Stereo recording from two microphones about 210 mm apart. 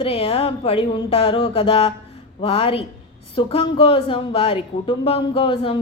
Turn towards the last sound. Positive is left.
turn(degrees=25)  # may be behind; listen again after turning